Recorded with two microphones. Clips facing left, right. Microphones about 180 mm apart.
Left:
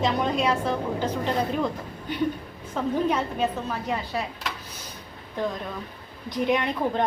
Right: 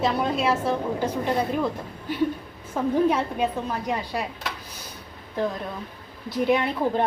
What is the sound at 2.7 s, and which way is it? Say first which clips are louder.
Speech: right 3 dB; 10° right (ahead or behind).